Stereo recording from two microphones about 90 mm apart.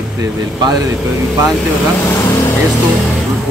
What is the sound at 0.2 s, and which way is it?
Speech, 50° right (ahead or behind).